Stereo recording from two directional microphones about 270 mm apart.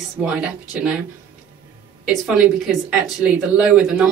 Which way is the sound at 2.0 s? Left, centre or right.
Centre.